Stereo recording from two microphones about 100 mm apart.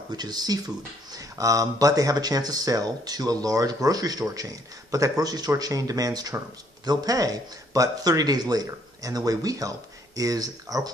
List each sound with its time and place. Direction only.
0.1 s speech: 45° right (ahead or behind)